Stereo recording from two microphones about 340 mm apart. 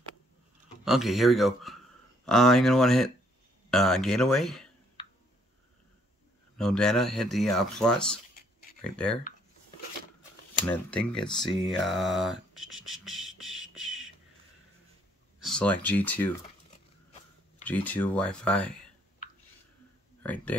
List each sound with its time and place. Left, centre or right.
0.8 s speech: centre
6.6 s speech: centre
10.6 s speech: centre
12.7 s beatboxing: centre
15.4 s speech: centre
17.6 s speech: centre
20.2 s speech: centre